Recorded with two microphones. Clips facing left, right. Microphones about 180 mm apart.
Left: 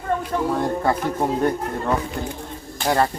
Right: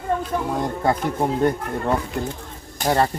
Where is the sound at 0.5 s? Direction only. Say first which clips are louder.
Even; 15° right (ahead or behind).